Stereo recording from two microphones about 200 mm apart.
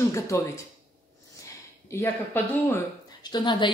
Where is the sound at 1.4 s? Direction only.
15° left (ahead or behind).